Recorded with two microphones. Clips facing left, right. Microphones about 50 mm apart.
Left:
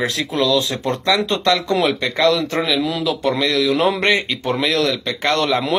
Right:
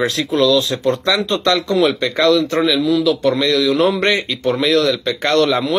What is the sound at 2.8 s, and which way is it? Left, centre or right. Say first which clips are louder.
Speech: right 5 dB; centre.